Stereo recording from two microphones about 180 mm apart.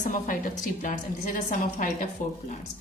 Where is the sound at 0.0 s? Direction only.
45° left (ahead or behind).